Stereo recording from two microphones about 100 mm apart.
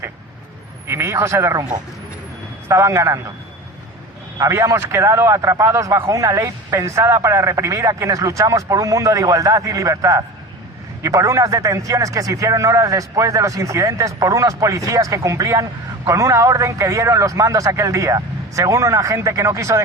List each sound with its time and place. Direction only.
0.9 s speech: 25° right (ahead or behind)
2.6 s speech: 30° right (ahead or behind)
4.4 s a man's voice: 30° right (ahead or behind)